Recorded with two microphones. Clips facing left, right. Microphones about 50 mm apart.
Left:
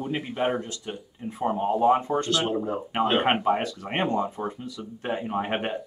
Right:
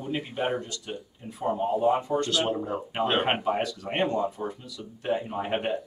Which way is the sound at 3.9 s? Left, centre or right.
Left.